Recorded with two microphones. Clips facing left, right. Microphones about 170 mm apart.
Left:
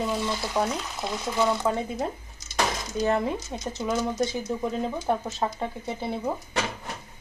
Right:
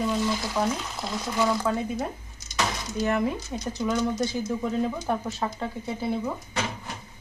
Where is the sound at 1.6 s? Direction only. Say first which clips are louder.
Even; 20° left (ahead or behind).